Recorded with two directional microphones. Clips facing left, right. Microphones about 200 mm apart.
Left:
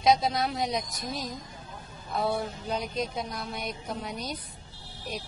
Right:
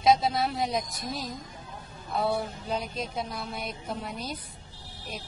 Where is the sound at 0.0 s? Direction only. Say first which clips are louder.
Right 1 dB; centre (ahead or behind).